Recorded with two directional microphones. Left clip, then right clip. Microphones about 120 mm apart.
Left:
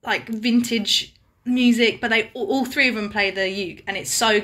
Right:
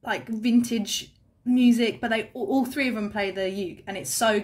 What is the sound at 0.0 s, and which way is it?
A woman's voice, 40° right (ahead or behind).